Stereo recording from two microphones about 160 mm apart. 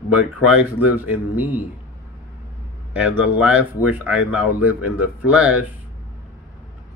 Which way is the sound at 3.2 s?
10° right (ahead or behind).